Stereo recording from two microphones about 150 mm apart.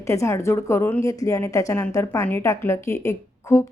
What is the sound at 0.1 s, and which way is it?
A woman's voice, 20° left (ahead or behind).